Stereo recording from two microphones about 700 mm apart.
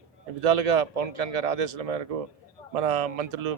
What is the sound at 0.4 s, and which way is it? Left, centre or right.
A man's voice, right.